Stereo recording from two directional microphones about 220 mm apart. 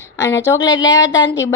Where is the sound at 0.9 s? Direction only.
60° left (ahead or behind).